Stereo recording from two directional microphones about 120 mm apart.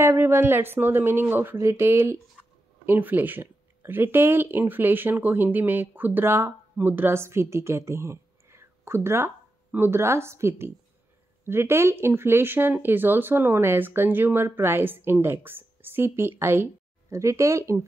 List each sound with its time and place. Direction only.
0.0 s speech: 20° right (ahead or behind)